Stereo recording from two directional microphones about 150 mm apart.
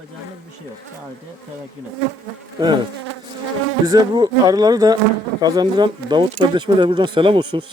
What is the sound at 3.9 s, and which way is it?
A man's voice, 25° right (ahead or behind).